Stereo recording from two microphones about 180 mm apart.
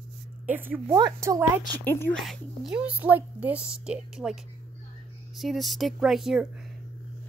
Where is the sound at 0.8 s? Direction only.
25° right (ahead or behind).